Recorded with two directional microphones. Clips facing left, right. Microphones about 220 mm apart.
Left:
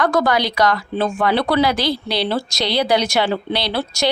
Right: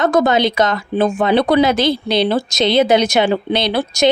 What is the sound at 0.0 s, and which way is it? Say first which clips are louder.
A woman's voice: right 4 dB; 20° right (ahead or behind).